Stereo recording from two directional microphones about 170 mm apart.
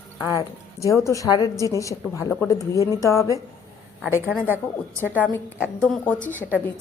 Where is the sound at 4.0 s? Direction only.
5° right (ahead or behind).